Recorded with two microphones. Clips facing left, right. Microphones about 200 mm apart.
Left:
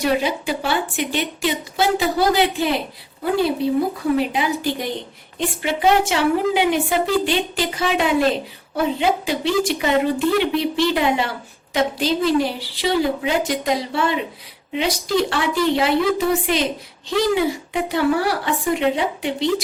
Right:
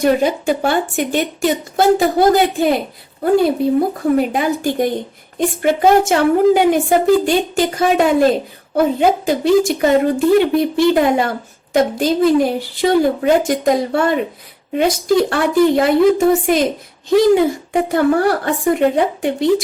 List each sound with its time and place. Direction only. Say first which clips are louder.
0.0 s speech: right 6 dB; 50° right (ahead or behind)